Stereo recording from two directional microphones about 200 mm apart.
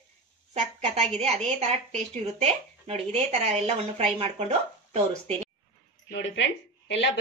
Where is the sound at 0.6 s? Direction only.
35° right (ahead or behind).